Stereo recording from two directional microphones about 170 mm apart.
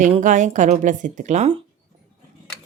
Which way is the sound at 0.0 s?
45° right (ahead or behind).